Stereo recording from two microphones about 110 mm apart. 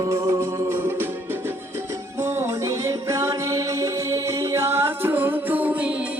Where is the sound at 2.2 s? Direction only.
25° right (ahead or behind).